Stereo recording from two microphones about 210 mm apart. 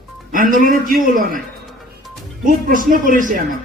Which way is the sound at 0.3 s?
40° right (ahead or behind).